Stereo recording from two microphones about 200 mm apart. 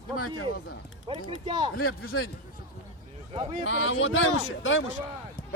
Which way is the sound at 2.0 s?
90° left.